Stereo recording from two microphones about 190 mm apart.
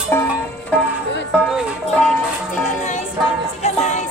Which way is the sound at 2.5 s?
40° left (ahead or behind).